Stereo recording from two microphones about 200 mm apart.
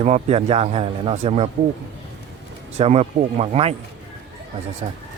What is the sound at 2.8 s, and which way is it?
Speech, 30° right (ahead or behind).